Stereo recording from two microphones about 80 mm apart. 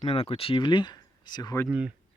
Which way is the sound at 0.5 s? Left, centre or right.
Left.